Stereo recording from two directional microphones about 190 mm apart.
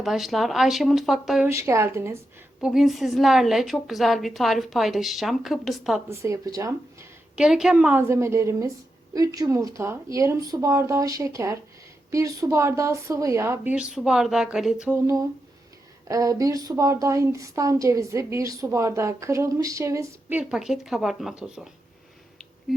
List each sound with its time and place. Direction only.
0.0 s a woman's voice: centre (ahead or behind)
1.5 s a woman's voice: 15° right (ahead or behind)
6.1 s a woman's voice: 15° right (ahead or behind)
7.3 s a woman's voice: 5° right (ahead or behind)
20.4 s a woman's voice: 5° right (ahead or behind)